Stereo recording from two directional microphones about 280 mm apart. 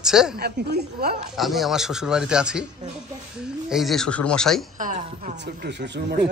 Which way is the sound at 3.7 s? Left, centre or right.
Centre.